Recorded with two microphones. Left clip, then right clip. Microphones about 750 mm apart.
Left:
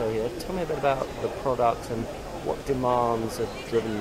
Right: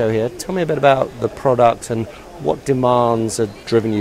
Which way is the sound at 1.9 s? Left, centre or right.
Right.